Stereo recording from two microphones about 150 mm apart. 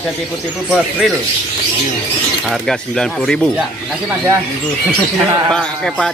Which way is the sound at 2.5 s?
Centre (ahead or behind).